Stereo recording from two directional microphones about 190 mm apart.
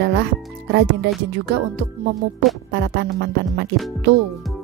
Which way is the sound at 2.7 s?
60° right (ahead or behind).